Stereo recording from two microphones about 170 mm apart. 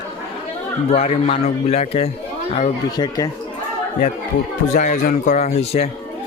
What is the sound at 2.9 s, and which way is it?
Speech, 20° left (ahead or behind).